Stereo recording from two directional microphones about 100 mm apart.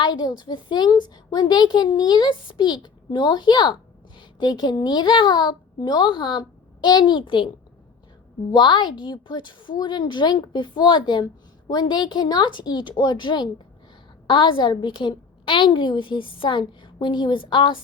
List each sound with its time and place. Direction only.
0.0 s a woman's voice: 45° left (ahead or behind)
8.5 s a woman's voice: 50° left (ahead or behind)